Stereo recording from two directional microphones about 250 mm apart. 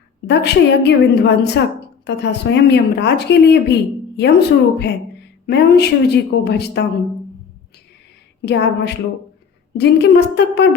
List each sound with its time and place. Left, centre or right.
0.3 s a woman's voice: left
8.4 s a woman's voice: left